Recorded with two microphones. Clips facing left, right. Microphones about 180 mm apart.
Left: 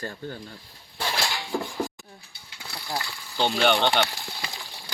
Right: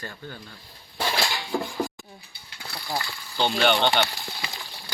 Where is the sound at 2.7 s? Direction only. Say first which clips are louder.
Right 1 dB; centre (ahead or behind).